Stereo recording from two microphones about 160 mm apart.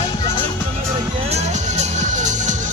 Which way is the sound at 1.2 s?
45° right (ahead or behind).